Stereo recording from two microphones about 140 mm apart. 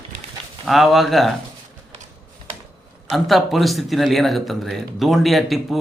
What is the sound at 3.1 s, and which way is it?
Speech, centre (ahead or behind).